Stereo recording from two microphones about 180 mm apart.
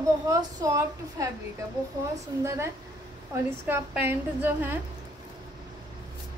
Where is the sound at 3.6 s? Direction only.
10° right (ahead or behind).